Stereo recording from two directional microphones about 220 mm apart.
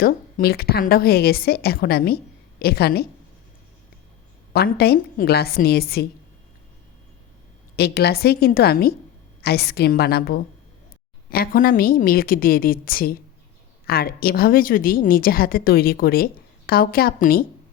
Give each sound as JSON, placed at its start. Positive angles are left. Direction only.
{"t": 0.0, "sound": "a woman's voice", "side_deg": 45}
{"t": 4.5, "sound": "a woman's voice", "side_deg": 45}
{"t": 7.8, "sound": "a woman's voice", "side_deg": 45}